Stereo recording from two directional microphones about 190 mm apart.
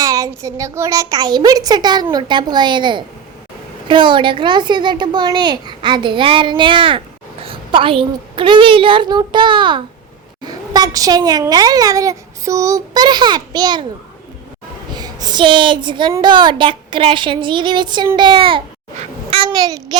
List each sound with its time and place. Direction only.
0.0 s a child's voice: 15° right (ahead or behind)
14.9 s a woman's voice: 20° right (ahead or behind)